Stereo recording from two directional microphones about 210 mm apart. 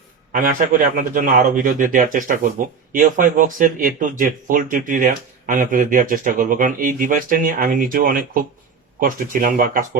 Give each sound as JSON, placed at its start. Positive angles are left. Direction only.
{"t": 0.3, "sound": "speech", "side_deg": -40}